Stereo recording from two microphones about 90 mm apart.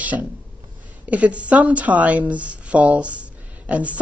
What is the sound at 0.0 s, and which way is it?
A woman's voice, 15° right (ahead or behind).